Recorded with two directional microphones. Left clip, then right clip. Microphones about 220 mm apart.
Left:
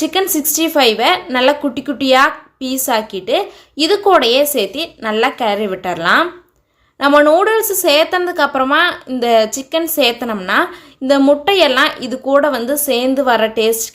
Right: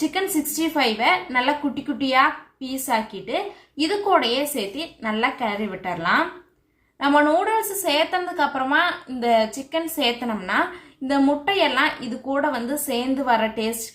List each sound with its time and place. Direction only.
0.1 s a woman's voice: 45° left (ahead or behind)